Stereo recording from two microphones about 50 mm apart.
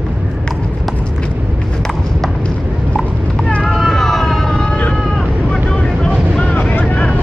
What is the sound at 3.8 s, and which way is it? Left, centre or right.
Vehicle, centre.